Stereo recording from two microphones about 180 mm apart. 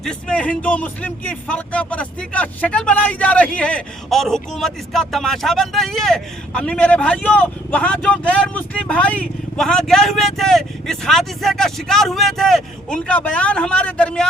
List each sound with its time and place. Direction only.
0.0 s speech: 5° left (ahead or behind)